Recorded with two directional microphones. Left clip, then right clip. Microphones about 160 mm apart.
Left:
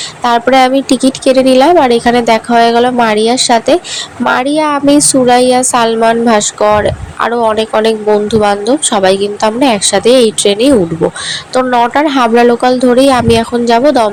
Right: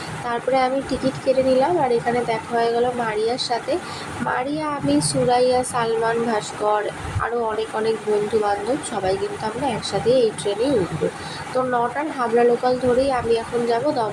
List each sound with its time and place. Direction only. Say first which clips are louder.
0.3 s a woman's voice: left 13 dB; 60° left (ahead or behind)